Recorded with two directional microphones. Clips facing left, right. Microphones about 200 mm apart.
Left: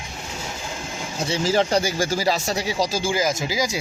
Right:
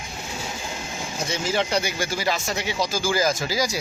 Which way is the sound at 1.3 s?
35° left (ahead or behind).